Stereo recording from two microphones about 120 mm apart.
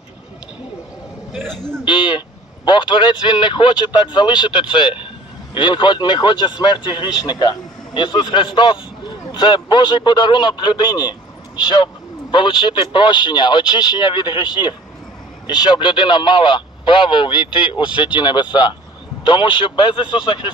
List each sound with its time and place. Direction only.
1.9 s a man's voice: 40° left (ahead or behind)